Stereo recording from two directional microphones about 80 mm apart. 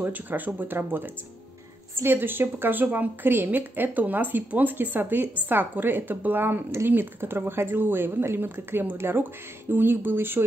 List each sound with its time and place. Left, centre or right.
0.0 s a woman's voice: right